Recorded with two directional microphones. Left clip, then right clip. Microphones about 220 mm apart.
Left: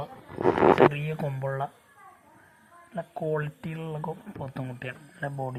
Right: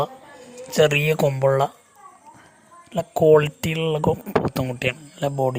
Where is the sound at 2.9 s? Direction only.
50° right (ahead or behind).